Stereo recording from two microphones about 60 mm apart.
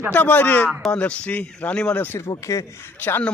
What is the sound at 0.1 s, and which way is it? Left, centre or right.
Speech, left.